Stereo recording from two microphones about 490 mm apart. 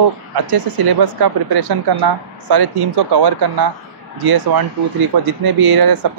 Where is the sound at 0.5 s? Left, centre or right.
Right.